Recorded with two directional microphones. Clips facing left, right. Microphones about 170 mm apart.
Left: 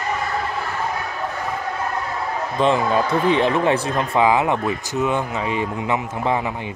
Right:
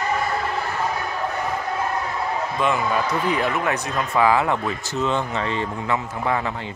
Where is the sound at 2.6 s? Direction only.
30° left (ahead or behind).